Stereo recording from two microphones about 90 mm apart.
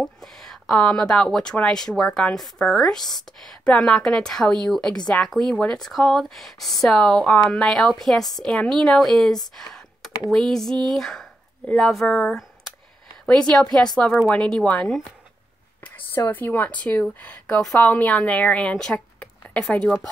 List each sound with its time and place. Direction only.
0.0 s speech: 5° left (ahead or behind)
9.6 s computer keyboard: 5° left (ahead or behind)
10.3 s speech: 5° left (ahead or behind)
16.3 s speech: 20° left (ahead or behind)